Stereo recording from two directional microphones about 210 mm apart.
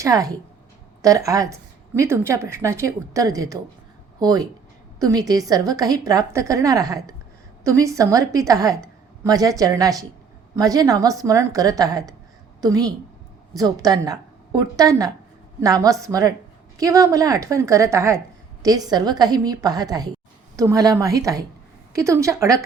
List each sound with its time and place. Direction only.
0.0 s a woman's voice: 15° right (ahead or behind)